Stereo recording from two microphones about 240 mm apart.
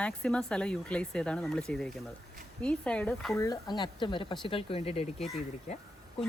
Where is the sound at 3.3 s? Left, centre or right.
Centre.